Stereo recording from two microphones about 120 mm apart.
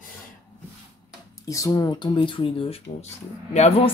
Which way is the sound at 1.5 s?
25° left (ahead or behind).